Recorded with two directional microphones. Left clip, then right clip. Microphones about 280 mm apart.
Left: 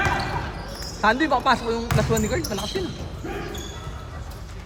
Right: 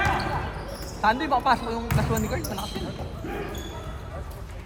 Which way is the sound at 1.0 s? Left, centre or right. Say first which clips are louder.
Left 2 dB; left.